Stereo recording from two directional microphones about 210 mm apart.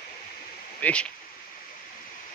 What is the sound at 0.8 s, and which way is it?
Speech, 5° left (ahead or behind).